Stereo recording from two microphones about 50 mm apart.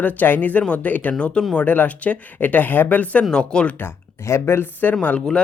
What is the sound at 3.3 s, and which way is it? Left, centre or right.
Speech, centre.